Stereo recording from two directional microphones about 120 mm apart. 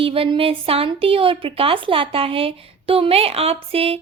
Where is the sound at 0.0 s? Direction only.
50° right (ahead or behind).